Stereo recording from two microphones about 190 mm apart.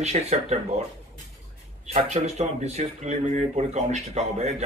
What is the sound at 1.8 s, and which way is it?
Speech, 35° right (ahead or behind).